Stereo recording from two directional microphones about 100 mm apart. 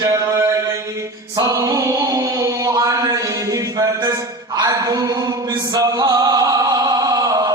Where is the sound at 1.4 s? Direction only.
35° right (ahead or behind).